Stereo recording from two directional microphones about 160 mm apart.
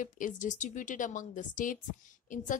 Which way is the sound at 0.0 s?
55° left (ahead or behind).